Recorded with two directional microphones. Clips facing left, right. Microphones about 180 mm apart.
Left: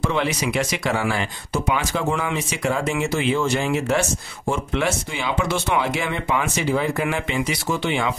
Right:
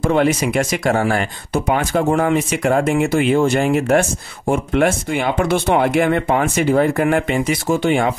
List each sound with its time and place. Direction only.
0.0 s speech: 50° right (ahead or behind)